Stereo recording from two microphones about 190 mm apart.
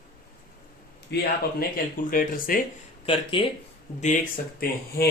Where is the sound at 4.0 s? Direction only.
45° left (ahead or behind).